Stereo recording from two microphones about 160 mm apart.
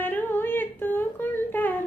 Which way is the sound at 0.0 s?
10° left (ahead or behind).